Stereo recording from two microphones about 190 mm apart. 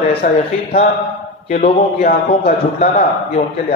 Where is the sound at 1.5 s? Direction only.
40° left (ahead or behind).